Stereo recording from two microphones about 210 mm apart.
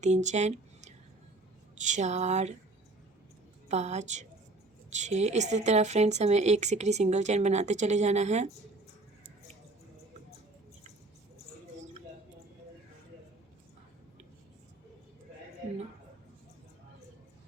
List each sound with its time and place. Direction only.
0.0 s speech: 35° right (ahead or behind)
3.7 s speech: 30° right (ahead or behind)